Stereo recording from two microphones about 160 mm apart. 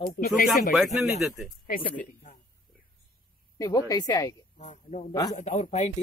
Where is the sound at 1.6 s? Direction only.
60° left (ahead or behind).